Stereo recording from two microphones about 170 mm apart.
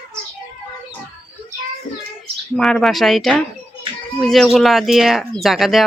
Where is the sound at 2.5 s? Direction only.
Centre (ahead or behind).